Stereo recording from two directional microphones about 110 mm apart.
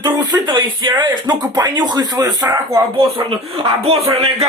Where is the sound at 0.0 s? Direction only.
45° right (ahead or behind).